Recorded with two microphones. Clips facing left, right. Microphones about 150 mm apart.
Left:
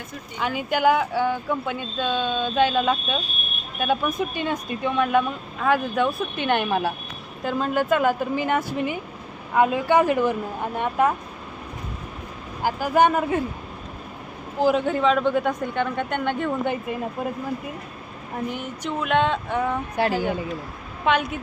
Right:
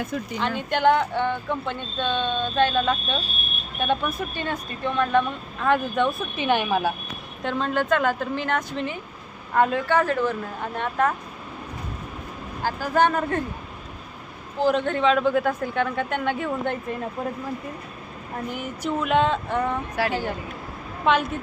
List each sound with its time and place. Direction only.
0.3 s a man's voice: 5° left (ahead or behind)
5.6 s a man's voice: 5° left (ahead or behind)
12.6 s speech: 15° left (ahead or behind)
14.6 s a man's voice: 5° left (ahead or behind)
18.5 s a man's voice: 5° right (ahead or behind)
20.0 s a woman's voice: 20° left (ahead or behind)
21.0 s a woman's voice: centre (ahead or behind)